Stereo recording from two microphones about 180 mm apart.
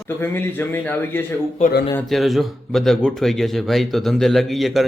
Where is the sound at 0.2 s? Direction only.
10° left (ahead or behind).